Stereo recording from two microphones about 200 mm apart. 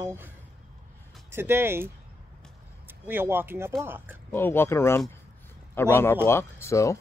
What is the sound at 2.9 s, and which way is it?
Speech, 10° right (ahead or behind).